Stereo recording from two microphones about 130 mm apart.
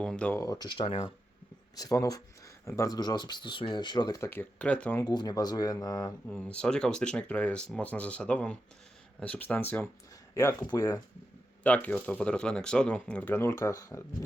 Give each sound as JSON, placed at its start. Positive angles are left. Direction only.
{"t": 0.0, "sound": "speech", "side_deg": 10}
{"t": 0.3, "sound": "speech", "side_deg": 30}
{"t": 4.3, "sound": "speech", "side_deg": 15}
{"t": 4.9, "sound": "speech", "side_deg": 30}
{"t": 6.2, "sound": "speech", "side_deg": 5}
{"t": 10.3, "sound": "speech", "side_deg": 25}
{"t": 11.6, "sound": "speech", "side_deg": 10}